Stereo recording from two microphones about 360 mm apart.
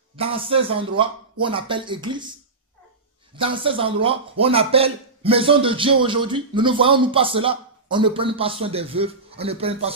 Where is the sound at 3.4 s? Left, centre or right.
Centre.